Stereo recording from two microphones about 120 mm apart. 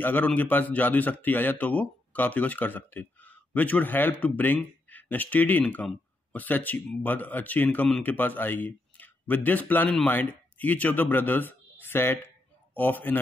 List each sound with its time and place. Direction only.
0.0 s speech: 15° left (ahead or behind)